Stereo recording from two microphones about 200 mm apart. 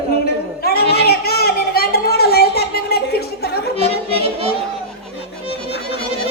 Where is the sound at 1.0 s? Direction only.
50° left (ahead or behind).